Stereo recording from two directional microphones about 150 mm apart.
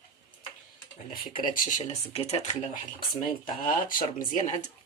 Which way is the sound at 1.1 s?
70° left (ahead or behind).